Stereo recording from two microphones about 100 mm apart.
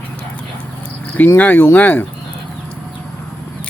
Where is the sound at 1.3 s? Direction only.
15° left (ahead or behind).